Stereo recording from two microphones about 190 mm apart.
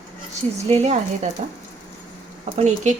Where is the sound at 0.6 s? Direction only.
35° right (ahead or behind).